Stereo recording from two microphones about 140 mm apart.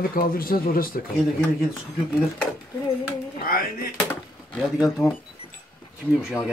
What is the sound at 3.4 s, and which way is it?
Speech, 90° left.